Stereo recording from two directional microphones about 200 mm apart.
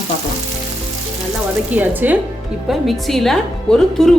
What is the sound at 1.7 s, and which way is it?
A woman's voice, 10° right (ahead or behind).